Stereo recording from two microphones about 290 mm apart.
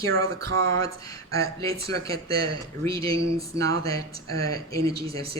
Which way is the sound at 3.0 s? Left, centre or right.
Centre.